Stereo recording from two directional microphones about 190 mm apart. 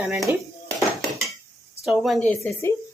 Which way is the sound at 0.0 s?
5° right (ahead or behind).